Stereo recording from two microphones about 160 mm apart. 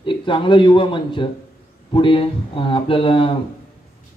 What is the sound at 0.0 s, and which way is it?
A man's voice, 30° left (ahead or behind).